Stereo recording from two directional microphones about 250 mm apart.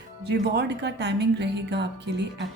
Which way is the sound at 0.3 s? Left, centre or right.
Right.